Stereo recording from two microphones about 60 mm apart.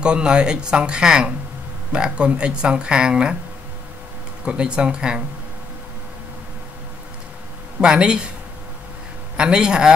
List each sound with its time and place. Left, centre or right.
0.0 s speech: centre
4.5 s speech: centre
7.8 s speech: centre
9.4 s speech: centre